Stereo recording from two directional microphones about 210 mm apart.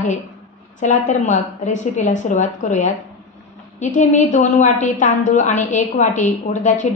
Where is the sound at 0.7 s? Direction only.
35° left (ahead or behind).